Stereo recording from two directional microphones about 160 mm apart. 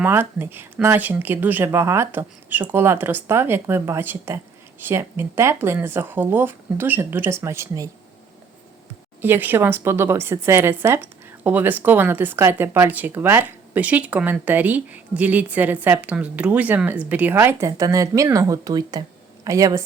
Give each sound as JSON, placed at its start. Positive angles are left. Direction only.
{"t": 0.0, "sound": "a woman's voice", "side_deg": -15}
{"t": 9.2, "sound": "a woman's voice", "side_deg": -15}